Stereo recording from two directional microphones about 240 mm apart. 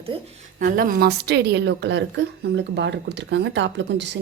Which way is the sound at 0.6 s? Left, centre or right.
Right.